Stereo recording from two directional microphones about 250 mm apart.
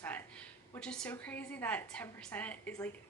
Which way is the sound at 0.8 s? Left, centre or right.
Centre.